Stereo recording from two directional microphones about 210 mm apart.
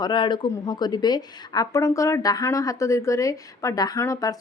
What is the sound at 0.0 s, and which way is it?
Speech, 20° left (ahead or behind).